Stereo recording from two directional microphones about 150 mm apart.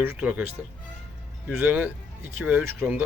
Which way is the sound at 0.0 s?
10° right (ahead or behind).